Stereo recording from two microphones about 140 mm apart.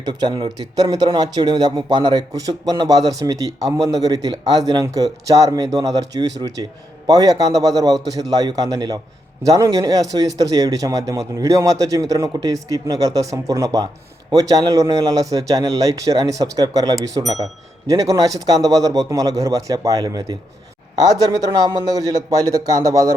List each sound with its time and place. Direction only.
0.0 s speech: 30° right (ahead or behind)